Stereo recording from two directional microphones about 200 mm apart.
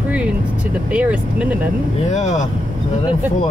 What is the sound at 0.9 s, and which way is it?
Speech, 5° right (ahead or behind).